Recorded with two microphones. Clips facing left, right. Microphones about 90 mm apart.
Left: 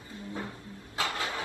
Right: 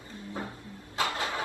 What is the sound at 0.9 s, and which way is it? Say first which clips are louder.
Vehicle: right 2 dB; 25° right (ahead or behind).